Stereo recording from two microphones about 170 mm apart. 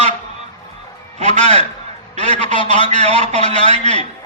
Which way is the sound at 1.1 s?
40° right (ahead or behind).